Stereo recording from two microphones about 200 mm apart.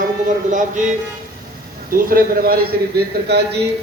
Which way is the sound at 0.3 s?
40° right (ahead or behind).